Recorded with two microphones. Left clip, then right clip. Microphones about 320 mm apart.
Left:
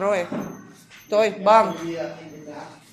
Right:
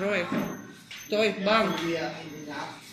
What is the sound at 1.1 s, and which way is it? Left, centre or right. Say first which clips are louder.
Speech: left 8 dB; centre.